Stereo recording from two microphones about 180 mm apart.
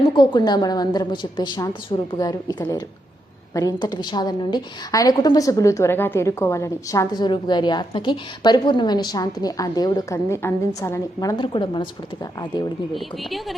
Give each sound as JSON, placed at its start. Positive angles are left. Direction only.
{"t": 0.2, "sound": "a woman's voice", "side_deg": 25}
{"t": 12.9, "sound": "speech", "side_deg": 0}